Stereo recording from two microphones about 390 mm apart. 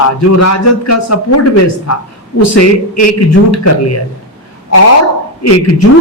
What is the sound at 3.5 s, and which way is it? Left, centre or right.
Speech, left.